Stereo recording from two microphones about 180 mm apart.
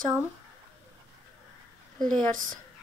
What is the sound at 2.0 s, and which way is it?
Speech, 45° right (ahead or behind).